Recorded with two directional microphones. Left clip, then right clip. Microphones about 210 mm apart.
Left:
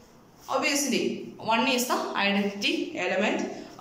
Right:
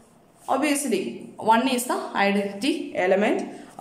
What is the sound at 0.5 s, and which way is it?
A man's voice, 35° right (ahead or behind).